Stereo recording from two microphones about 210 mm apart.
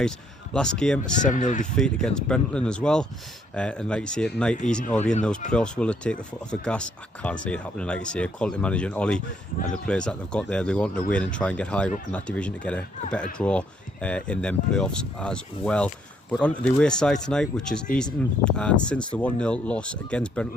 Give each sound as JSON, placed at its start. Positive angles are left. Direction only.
{"t": 0.5, "sound": "speech", "side_deg": 5}
{"t": 1.2, "sound": "speech", "side_deg": 35}
{"t": 1.7, "sound": "speech", "side_deg": 5}
{"t": 4.7, "sound": "speech", "side_deg": 35}
{"t": 5.5, "sound": "speech", "side_deg": 5}